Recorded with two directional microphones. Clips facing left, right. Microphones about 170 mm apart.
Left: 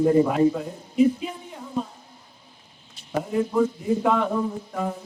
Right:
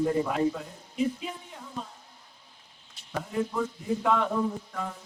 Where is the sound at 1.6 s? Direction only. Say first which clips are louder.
Left 10 dB; 25° left (ahead or behind).